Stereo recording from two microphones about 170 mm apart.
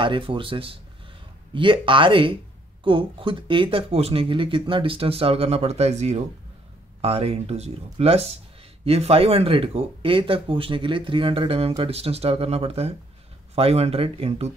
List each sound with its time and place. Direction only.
0.0 s speech: 30° right (ahead or behind)